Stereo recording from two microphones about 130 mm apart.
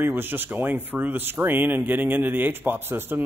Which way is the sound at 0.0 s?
15° right (ahead or behind).